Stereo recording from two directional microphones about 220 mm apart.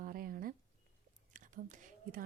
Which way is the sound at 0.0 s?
40° right (ahead or behind).